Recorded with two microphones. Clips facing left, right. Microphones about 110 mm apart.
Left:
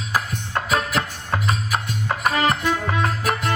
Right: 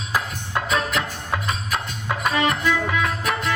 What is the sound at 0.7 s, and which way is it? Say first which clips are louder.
Music: left 2 dB; 35° left (ahead or behind).